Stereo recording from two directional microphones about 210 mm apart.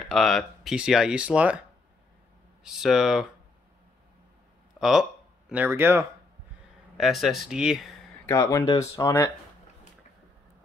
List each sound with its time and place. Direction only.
0.1 s speech: centre (ahead or behind)
2.6 s speech: centre (ahead or behind)
4.7 s speech: centre (ahead or behind)
7.0 s speech: centre (ahead or behind)
8.3 s speech: 15° left (ahead or behind)